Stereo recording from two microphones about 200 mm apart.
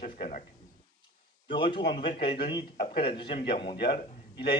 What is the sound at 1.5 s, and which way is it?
Speech, 25° left (ahead or behind).